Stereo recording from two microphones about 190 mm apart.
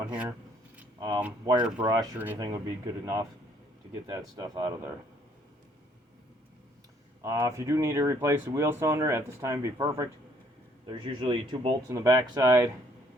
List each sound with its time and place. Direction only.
0.1 s speech: 5° right (ahead or behind)
0.9 s speech: 25° right (ahead or behind)
1.6 s speech: 5° right (ahead or behind)
2.4 s speech: 20° right (ahead or behind)
7.3 s speech: 15° right (ahead or behind)
11.9 s speech: 15° right (ahead or behind)